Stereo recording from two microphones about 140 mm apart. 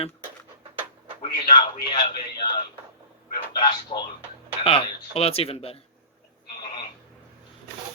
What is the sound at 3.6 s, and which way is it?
Speech, 30° left (ahead or behind).